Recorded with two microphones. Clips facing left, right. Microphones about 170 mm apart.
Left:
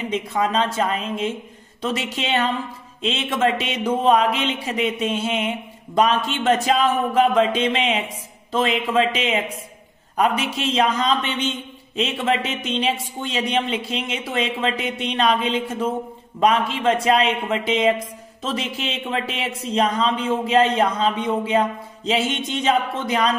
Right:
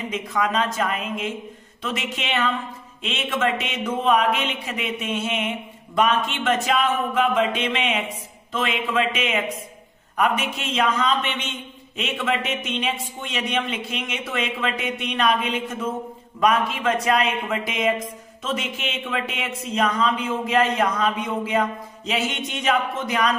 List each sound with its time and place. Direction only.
0.1 s speech: 30° left (ahead or behind)